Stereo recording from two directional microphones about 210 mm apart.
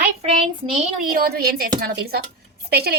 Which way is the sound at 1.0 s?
45° right (ahead or behind).